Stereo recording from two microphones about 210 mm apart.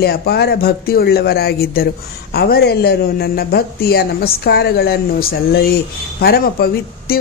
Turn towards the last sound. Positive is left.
turn(degrees=45)  # may be behind; listen again after turning